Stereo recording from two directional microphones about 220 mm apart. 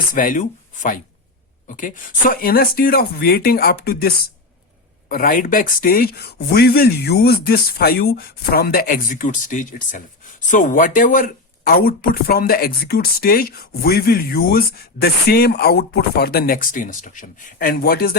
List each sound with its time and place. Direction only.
0.1 s speech: 40° left (ahead or behind)